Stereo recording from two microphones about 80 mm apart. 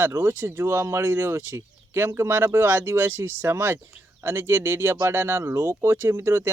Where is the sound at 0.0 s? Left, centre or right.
Right.